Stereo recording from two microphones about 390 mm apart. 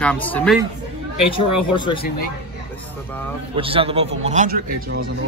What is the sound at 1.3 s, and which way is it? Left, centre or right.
Speech, left.